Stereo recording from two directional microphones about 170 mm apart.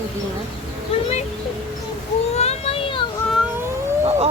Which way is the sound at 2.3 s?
40° left (ahead or behind).